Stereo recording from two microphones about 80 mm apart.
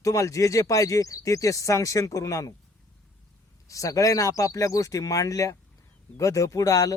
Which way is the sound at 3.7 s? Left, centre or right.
Left.